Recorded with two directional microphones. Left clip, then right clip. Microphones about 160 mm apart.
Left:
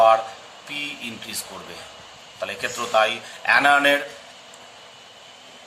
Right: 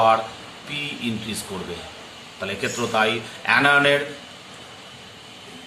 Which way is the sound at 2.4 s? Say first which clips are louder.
Right 2 dB; 40° left (ahead or behind).